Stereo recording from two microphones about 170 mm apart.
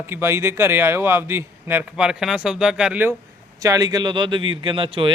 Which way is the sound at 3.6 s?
20° right (ahead or behind).